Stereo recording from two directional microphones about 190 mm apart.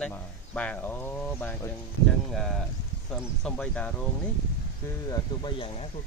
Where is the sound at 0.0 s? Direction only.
5° left (ahead or behind).